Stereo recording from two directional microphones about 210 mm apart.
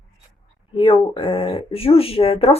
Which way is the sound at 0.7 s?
25° left (ahead or behind).